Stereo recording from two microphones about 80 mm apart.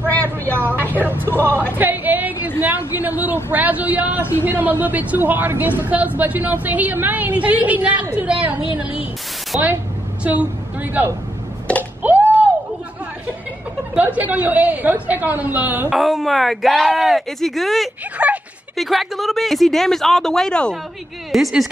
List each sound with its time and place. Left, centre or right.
0.9 s a woman's voice: right
1.5 s speech: left
1.8 s a sound: right
2.6 s a woman's voice: right
12.0 s a sound: right
13.9 s a woman's voice: centre
15.9 s speech: centre
18.1 s speech: centre
18.8 s speech: centre
21.3 s speech: centre